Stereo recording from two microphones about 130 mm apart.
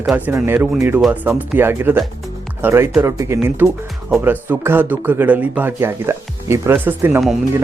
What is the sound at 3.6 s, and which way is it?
Speech, centre (ahead or behind).